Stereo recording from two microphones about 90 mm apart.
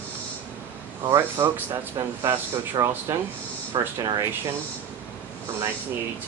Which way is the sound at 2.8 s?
50° right (ahead or behind).